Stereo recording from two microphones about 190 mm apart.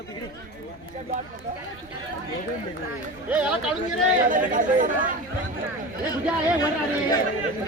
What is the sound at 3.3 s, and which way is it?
Speech, 5° right (ahead or behind).